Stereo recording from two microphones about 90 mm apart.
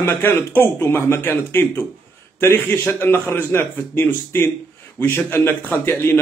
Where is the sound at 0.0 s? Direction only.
20° left (ahead or behind).